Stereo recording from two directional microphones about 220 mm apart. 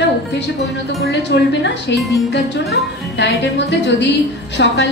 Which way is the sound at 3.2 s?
50° left (ahead or behind).